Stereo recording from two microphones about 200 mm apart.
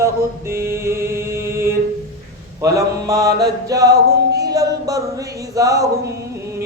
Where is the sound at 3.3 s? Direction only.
55° right (ahead or behind).